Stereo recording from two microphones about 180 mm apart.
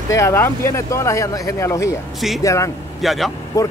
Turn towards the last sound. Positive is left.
turn(degrees=20)  # may be behind; listen again after turning